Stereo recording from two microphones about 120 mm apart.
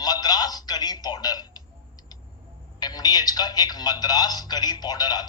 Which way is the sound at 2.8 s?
35° left (ahead or behind).